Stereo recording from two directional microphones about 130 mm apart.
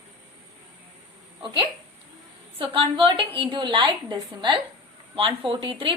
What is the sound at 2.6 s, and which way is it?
A woman's voice, 45° right (ahead or behind).